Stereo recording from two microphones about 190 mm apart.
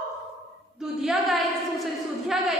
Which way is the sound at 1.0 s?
Centre (ahead or behind).